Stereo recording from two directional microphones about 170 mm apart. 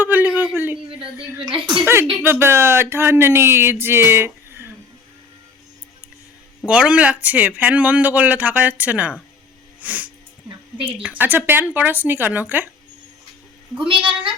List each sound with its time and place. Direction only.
0.0 s a sound: 10° right (ahead or behind)
1.5 s a woman's voice: 30° right (ahead or behind)
1.7 s speech: 10° right (ahead or behind)
6.7 s speech: 5° right (ahead or behind)
9.8 s music: 10° right (ahead or behind)
11.0 s speech: 10° right (ahead or behind)
13.7 s a woman's voice: 30° right (ahead or behind)